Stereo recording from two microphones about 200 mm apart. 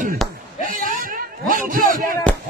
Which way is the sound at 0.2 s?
Centre (ahead or behind).